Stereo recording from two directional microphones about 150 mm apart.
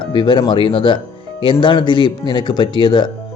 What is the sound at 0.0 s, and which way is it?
Speech, 30° left (ahead or behind).